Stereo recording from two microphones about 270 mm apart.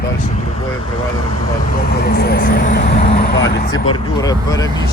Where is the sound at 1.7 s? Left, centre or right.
Left.